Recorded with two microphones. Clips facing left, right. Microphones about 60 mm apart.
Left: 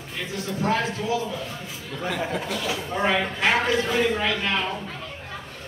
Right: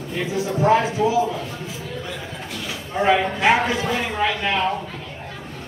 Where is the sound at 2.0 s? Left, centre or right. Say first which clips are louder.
Left 5 dB; left.